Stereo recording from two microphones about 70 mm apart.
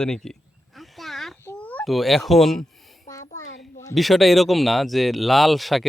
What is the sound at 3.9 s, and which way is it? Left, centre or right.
Speech, centre.